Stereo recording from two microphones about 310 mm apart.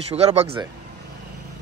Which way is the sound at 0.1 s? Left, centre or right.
Right.